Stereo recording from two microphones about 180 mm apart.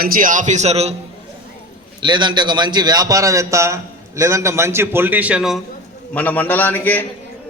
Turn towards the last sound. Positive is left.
turn(degrees=10)  # may be behind; listen again after turning